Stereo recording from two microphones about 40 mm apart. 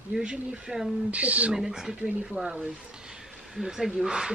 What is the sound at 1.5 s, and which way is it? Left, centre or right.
Speech, centre.